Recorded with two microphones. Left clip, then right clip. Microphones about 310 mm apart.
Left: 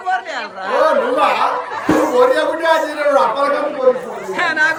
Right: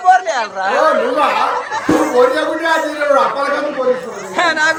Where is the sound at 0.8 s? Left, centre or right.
Centre.